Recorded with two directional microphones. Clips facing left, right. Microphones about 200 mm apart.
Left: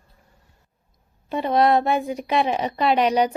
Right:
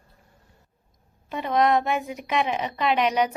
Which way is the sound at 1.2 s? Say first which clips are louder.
Left 3 dB; 35° left (ahead or behind).